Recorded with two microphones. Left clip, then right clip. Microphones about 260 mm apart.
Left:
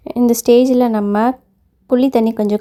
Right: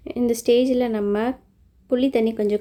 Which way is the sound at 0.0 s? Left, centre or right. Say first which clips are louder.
Left 7 dB; left.